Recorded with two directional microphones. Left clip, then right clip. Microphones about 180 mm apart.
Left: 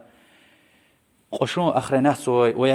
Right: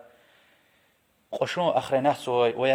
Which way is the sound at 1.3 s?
25° left (ahead or behind).